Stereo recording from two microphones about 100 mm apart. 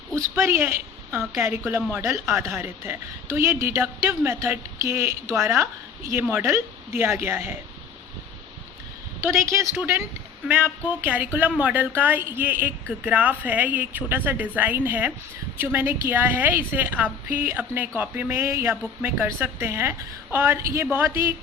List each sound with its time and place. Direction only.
0.2 s a woman's voice: 25° right (ahead or behind)
9.2 s a woman's voice: 25° right (ahead or behind)